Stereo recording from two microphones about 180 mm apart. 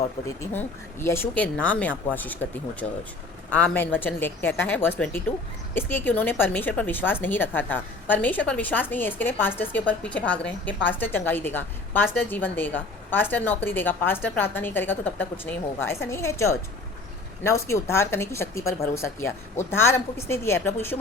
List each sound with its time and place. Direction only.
0.3 s a woman's voice: 15° left (ahead or behind)
3.5 s a woman's voice: 10° left (ahead or behind)
17.7 s a woman's voice: 15° left (ahead or behind)